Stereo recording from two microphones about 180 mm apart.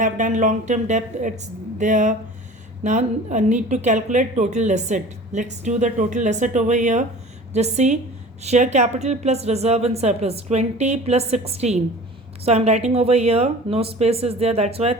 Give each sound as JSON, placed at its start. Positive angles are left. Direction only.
{"t": 0.0, "sound": "a woman's voice", "side_deg": -45}